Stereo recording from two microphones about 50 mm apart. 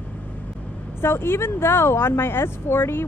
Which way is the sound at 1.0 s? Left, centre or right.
Left.